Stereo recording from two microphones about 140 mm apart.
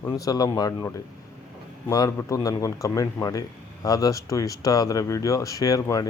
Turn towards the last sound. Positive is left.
turn(degrees=25)  # may be behind; listen again after turning